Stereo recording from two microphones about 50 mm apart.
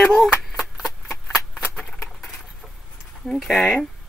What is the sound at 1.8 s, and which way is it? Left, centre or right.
Patter, centre.